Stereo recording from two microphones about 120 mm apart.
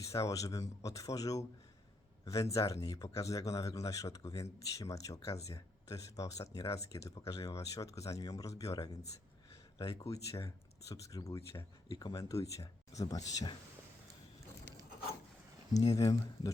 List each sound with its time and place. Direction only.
0.0 s speech: 25° left (ahead or behind)
16.0 s speech: 30° left (ahead or behind)